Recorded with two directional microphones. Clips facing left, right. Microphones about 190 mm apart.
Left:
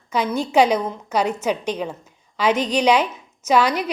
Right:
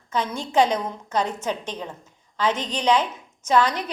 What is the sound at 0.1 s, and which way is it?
A woman's voice, 10° left (ahead or behind).